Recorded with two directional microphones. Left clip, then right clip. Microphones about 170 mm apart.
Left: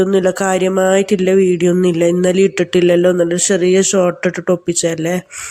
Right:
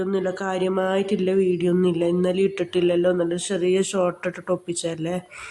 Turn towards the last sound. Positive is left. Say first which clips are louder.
# left 10 dB
turn(degrees=20)  # may be behind; listen again after turning